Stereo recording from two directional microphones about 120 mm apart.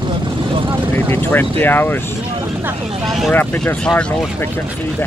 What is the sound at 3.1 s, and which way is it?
Speech, centre (ahead or behind).